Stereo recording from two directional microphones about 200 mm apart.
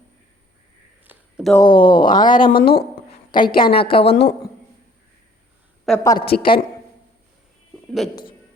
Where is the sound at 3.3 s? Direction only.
25° left (ahead or behind).